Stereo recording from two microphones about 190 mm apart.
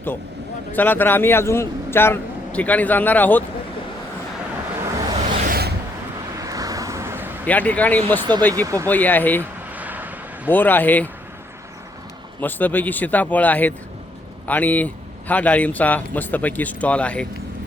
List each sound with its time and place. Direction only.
0.7 s a man's voice: 10° left (ahead or behind)
5.1 s a sound: 40° right (ahead or behind)
6.3 s vehicle: 20° right (ahead or behind)
7.4 s a man's voice: 10° left (ahead or behind)
8.6 s speech: 15° right (ahead or behind)
8.9 s a man's voice: 10° left (ahead or behind)
9.4 s a sound: 10° right (ahead or behind)
10.5 s a man's voice: 10° left (ahead or behind)
12.4 s a man's voice: 10° left (ahead or behind)